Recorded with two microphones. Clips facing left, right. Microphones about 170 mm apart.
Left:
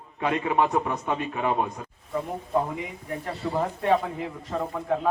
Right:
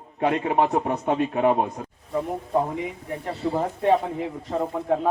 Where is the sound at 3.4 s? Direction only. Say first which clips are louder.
Right 3 dB; 25° right (ahead or behind).